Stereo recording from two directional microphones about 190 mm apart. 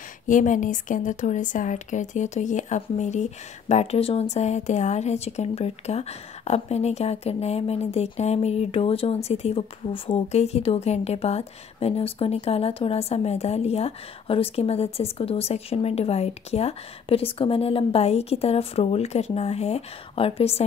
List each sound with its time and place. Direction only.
0.3 s speech: 45° left (ahead or behind)